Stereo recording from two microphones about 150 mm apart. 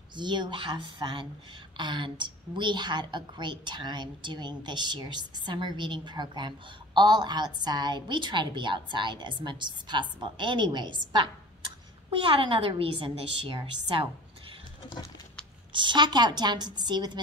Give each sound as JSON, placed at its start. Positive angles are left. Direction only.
{"t": 0.1, "sound": "a woman's voice", "side_deg": -30}
{"t": 15.7, "sound": "a woman's voice", "side_deg": -30}